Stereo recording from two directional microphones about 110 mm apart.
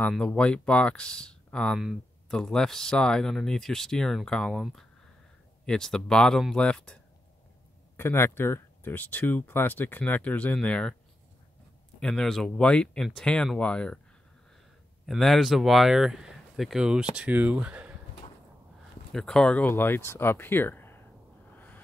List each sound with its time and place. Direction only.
0.3 s speech: 10° left (ahead or behind)
8.0 s speech: 20° left (ahead or behind)
12.0 s speech: 5° left (ahead or behind)
15.0 s speech: centre (ahead or behind)
19.1 s speech: 5° left (ahead or behind)
21.5 s snort: 15° left (ahead or behind)